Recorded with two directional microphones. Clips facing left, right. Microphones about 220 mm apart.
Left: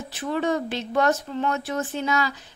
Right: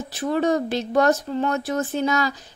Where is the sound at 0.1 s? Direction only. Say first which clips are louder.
Right 4 dB; 40° right (ahead or behind).